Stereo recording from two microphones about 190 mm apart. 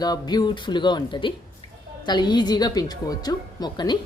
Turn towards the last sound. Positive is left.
turn(degrees=20)  # may be behind; listen again after turning